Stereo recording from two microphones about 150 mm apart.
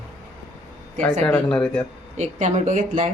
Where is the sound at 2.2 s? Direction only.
50° right (ahead or behind).